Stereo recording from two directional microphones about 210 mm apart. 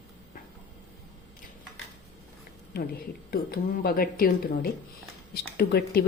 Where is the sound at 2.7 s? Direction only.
45° left (ahead or behind).